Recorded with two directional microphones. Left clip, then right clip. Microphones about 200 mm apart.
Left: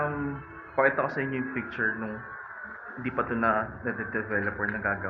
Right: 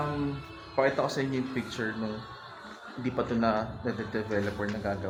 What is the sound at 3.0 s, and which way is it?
A man's voice, 10° right (ahead or behind).